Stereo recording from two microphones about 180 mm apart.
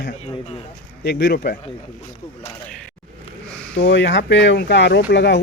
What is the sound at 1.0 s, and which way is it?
Speech, 65° left (ahead or behind).